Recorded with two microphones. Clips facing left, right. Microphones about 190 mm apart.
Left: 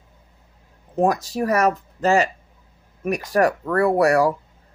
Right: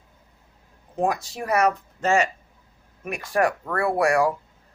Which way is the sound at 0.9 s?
40° left (ahead or behind).